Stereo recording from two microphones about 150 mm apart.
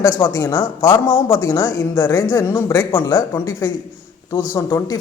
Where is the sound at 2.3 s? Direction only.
15° left (ahead or behind).